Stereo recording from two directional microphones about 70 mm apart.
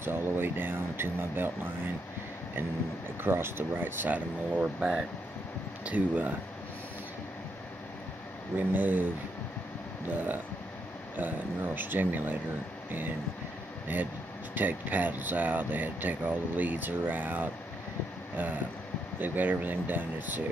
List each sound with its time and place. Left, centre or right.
0.0 s speech: right
3.2 s speech: right
8.5 s speech: right
10.0 s speech: right
13.9 s speech: right
18.3 s vehicle: right
19.1 s speech: right